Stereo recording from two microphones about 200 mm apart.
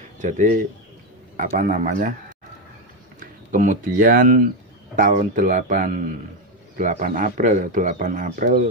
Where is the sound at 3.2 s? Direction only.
40° right (ahead or behind).